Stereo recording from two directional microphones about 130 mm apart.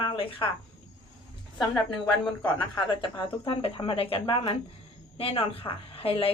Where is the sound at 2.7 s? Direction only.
35° left (ahead or behind).